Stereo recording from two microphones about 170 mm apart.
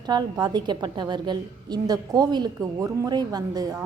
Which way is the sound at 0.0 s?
25° right (ahead or behind).